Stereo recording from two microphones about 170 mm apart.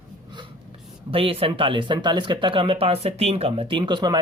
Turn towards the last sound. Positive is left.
turn(degrees=-25)  # may be behind; listen again after turning